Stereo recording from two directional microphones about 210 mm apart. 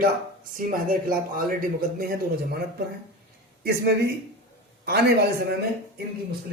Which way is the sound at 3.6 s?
50° right (ahead or behind).